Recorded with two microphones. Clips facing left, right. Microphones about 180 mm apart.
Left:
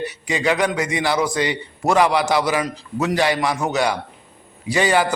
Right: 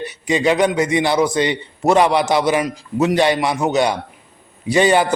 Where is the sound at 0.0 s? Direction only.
20° right (ahead or behind).